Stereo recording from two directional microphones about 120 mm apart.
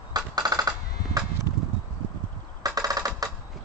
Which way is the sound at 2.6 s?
30° right (ahead or behind).